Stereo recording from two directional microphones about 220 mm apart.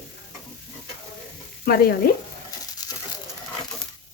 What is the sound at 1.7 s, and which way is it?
Speech, 45° left (ahead or behind).